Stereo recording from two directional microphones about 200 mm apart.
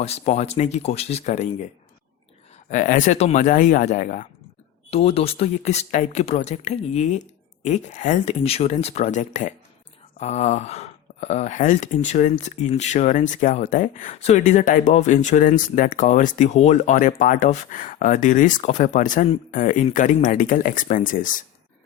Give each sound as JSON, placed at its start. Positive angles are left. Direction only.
{"t": 0.0, "sound": "speech", "side_deg": 30}
{"t": 2.6, "sound": "speech", "side_deg": 40}